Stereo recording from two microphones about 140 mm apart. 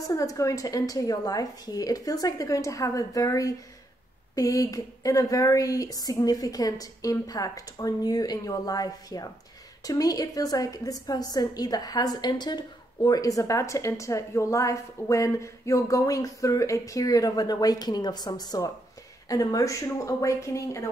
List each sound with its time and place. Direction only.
0.0 s a woman's voice: 25° left (ahead or behind)